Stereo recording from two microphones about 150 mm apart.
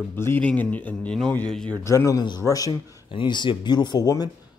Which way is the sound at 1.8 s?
20° left (ahead or behind).